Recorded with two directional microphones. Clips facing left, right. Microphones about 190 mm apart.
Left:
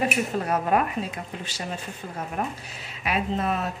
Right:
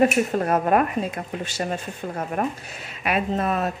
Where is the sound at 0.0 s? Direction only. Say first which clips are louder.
Right 6 dB; 50° right (ahead or behind).